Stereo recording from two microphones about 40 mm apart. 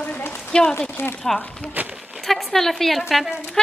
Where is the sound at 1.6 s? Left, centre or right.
Left.